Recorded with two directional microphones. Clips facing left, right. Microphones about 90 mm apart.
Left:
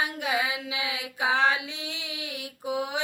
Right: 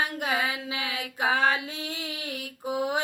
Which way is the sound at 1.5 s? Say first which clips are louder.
Even; 35° right (ahead or behind).